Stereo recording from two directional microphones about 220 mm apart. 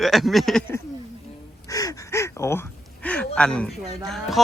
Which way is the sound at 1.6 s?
15° left (ahead or behind).